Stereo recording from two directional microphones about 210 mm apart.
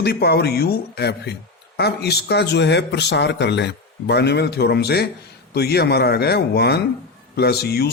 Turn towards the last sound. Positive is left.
turn(degrees=50)  # may be behind; listen again after turning